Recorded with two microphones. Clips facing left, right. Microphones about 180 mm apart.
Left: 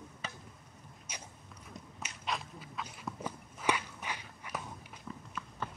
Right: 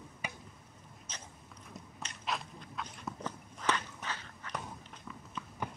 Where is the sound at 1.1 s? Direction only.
10° left (ahead or behind).